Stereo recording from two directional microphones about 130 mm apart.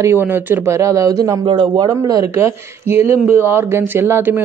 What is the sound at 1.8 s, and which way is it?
A woman's voice, 25° right (ahead or behind).